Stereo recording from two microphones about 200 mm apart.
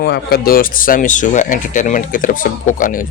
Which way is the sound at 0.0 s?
50° left (ahead or behind).